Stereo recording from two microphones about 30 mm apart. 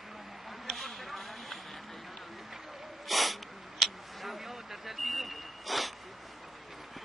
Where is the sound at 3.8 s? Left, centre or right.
Centre.